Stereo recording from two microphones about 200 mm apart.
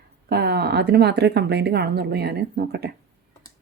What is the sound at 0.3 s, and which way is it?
A woman's voice, 50° right (ahead or behind).